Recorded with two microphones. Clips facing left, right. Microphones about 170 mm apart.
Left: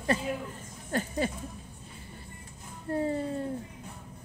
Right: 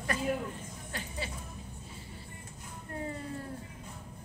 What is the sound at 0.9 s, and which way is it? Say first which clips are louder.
Music: left 11 dB; 45° left (ahead or behind).